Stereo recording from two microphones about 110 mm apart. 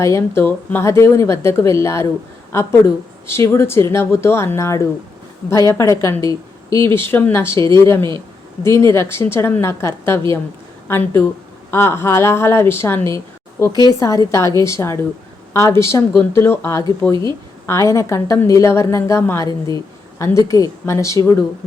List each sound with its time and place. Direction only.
0.0 s speech: 25° left (ahead or behind)
13.7 s speech: 35° left (ahead or behind)
19.5 s speech: 35° left (ahead or behind)